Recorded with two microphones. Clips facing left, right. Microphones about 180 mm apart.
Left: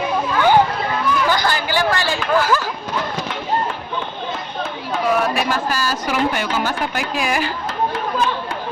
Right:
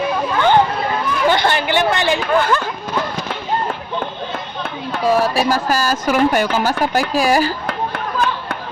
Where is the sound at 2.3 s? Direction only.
5° left (ahead or behind).